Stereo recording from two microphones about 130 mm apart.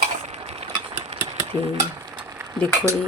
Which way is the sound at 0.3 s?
55° right (ahead or behind).